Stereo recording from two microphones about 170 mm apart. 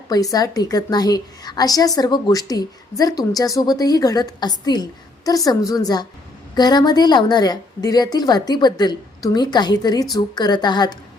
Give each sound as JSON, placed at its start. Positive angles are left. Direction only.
{"t": 0.1, "sound": "a woman's voice", "side_deg": 20}